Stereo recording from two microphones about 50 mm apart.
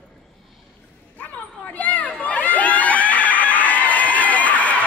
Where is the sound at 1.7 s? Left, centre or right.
Left.